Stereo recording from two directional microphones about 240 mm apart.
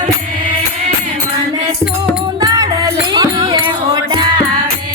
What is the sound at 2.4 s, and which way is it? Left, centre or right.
Music, centre.